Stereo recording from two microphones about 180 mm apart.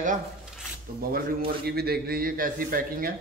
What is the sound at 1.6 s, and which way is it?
Speech, 60° right (ahead or behind).